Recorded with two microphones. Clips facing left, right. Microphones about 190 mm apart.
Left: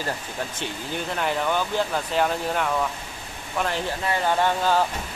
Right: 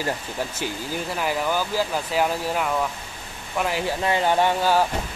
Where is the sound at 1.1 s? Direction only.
5° right (ahead or behind).